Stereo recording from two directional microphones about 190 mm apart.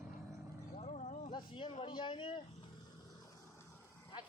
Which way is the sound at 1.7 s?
30° left (ahead or behind).